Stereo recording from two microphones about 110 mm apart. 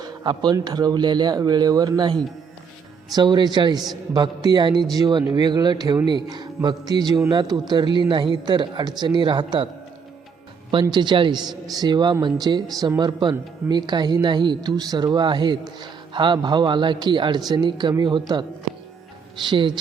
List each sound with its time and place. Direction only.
0.0 s a sound: 40° right (ahead or behind)
0.5 s a man's voice: 40° right (ahead or behind)
10.8 s a man's voice: 45° right (ahead or behind)
19.5 s speech: 45° right (ahead or behind)